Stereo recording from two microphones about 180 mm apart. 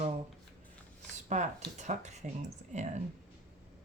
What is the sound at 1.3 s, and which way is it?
Speech, 40° right (ahead or behind).